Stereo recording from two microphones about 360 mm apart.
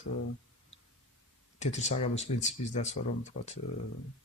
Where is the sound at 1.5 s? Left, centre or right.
Centre.